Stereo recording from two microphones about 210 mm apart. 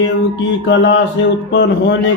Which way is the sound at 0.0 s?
60° left (ahead or behind).